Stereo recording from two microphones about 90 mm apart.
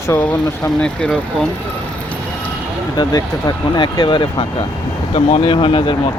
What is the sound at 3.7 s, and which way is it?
Speech, 60° left (ahead or behind).